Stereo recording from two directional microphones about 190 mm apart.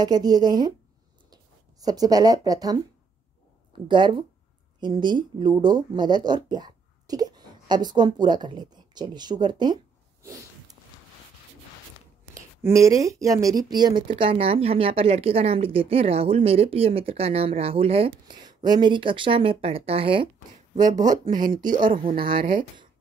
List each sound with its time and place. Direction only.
0.0 s speech: 20° right (ahead or behind)
3.8 s speech: 25° right (ahead or behind)
12.6 s speech: 15° right (ahead or behind)
20.7 s speech: 40° right (ahead or behind)